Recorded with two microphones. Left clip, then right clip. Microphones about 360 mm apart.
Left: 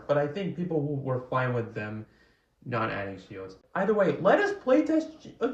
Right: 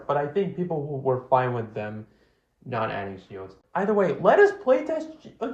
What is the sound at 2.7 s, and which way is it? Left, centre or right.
Speech, centre.